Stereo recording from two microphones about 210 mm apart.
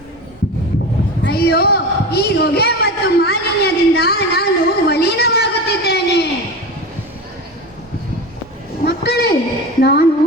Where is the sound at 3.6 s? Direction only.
50° left (ahead or behind).